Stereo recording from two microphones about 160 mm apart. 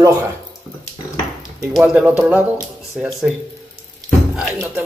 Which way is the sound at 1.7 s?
5° right (ahead or behind).